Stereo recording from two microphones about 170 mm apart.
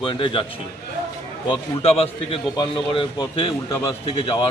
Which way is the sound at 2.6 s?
25° left (ahead or behind).